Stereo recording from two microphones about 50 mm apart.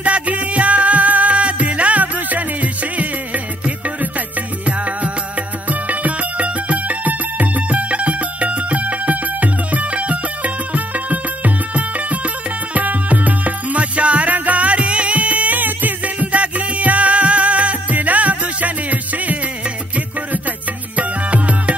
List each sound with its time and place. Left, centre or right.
0.0 s music: right
20.9 s music: right